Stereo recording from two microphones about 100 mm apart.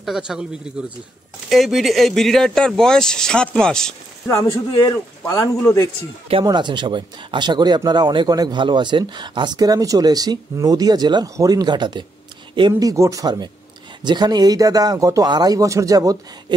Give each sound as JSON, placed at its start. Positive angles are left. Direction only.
{"t": 0.0, "sound": "speech", "side_deg": -5}
{"t": 5.2, "sound": "speech", "side_deg": 35}
{"t": 6.4, "sound": "speech", "side_deg": -50}
{"t": 8.3, "sound": "speech", "side_deg": -40}
{"t": 12.7, "sound": "speech", "side_deg": -35}
{"t": 14.0, "sound": "speech", "side_deg": -45}